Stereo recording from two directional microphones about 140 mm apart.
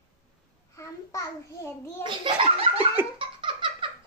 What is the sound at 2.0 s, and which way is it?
Speech, 35° right (ahead or behind).